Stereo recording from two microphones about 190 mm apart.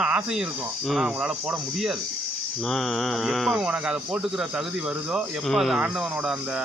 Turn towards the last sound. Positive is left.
turn(degrees=-5)  # may be behind; listen again after turning